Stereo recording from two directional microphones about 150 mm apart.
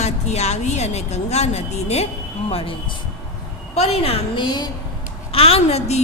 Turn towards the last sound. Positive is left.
turn(degrees=45)  # may be behind; listen again after turning